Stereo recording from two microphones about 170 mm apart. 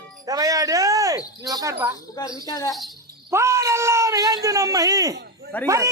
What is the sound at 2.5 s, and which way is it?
Speech, 20° left (ahead or behind).